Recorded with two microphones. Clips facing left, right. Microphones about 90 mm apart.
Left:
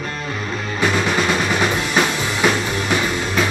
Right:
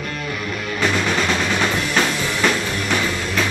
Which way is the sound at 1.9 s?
15° left (ahead or behind).